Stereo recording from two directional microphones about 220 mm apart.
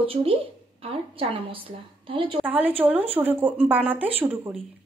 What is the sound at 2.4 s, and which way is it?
Speech, 10° right (ahead or behind).